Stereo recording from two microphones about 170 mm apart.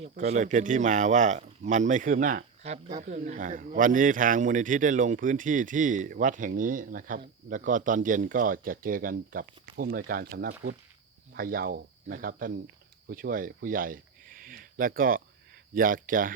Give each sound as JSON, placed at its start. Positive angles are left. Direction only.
{"t": 0.1, "sound": "speech", "side_deg": -45}
{"t": 2.6, "sound": "speech", "side_deg": -40}